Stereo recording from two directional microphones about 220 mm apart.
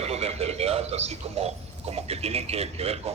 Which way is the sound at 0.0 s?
30° right (ahead or behind).